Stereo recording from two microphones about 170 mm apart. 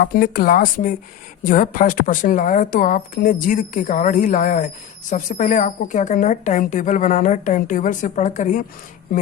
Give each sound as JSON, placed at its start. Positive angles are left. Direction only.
{"t": 0.0, "sound": "a woman's voice", "side_deg": 60}